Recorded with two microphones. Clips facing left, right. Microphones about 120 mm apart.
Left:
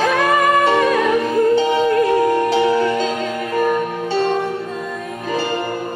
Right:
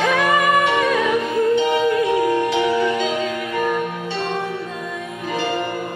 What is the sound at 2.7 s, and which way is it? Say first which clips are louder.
Music: left 2 dB; centre (ahead or behind).